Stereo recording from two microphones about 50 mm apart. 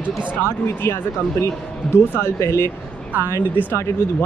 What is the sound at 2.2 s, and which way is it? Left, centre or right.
Speech, left.